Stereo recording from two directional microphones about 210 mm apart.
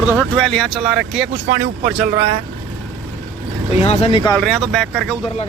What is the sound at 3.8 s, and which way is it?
Speech, 30° left (ahead or behind).